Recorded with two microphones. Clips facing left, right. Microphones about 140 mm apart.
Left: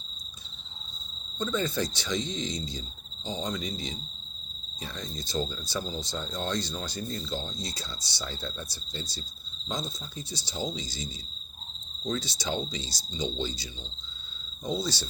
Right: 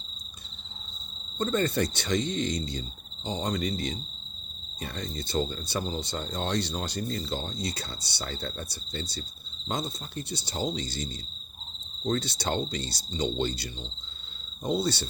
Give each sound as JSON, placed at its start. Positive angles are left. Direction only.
{"t": 1.4, "sound": "speech", "side_deg": -60}
{"t": 4.9, "sound": "speech", "side_deg": -60}